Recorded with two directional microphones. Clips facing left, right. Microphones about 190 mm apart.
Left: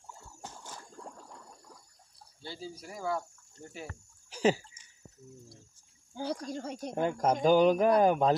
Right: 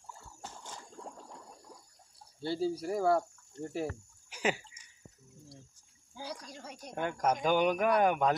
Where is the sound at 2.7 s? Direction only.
65° right (ahead or behind).